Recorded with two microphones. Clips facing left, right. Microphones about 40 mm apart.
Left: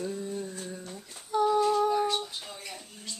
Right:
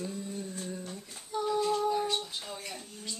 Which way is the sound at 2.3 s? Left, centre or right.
Centre.